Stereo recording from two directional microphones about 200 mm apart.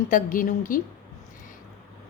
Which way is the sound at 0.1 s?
40° left (ahead or behind).